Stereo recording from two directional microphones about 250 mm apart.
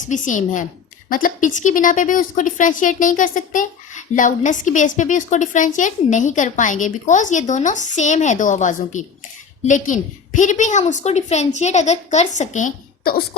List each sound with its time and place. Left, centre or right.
0.0 s a woman's voice: left